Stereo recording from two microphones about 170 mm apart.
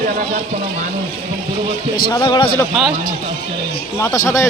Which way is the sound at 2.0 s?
25° left (ahead or behind).